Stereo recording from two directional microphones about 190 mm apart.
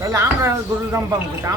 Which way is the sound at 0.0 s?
15° right (ahead or behind).